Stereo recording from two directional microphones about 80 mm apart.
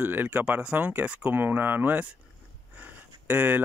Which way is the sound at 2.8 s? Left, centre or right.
Right.